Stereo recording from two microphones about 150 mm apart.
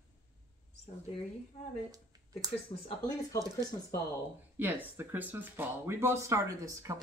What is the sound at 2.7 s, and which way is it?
Speech, 40° left (ahead or behind).